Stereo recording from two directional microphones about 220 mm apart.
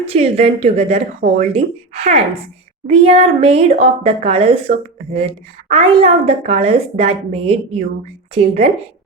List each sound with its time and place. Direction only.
0.1 s a woman's voice: 25° right (ahead or behind)